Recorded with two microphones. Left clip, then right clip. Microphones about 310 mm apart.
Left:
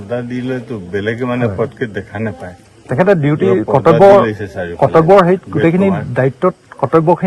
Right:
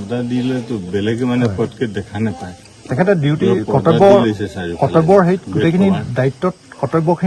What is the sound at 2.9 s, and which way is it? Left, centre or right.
Speech, centre.